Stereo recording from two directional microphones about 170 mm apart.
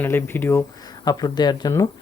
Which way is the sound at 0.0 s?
15° left (ahead or behind).